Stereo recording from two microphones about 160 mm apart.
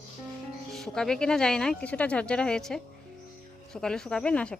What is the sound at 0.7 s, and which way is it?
Speech, 5° left (ahead or behind).